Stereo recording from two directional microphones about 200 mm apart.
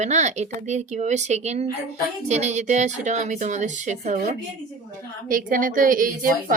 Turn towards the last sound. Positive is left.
turn(degrees=-45)  # may be behind; listen again after turning